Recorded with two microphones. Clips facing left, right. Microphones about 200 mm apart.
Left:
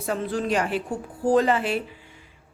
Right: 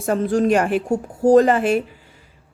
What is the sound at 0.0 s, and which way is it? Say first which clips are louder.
A woman's voice: right 8 dB; 45° right (ahead or behind).